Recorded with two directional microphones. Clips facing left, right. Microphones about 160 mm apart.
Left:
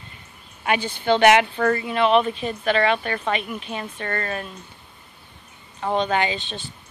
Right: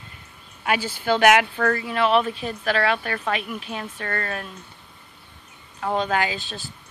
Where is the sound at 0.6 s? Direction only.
5° right (ahead or behind).